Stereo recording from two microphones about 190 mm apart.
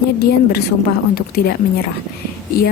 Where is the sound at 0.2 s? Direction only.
55° left (ahead or behind).